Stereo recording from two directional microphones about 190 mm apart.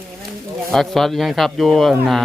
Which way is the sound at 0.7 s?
Centre (ahead or behind).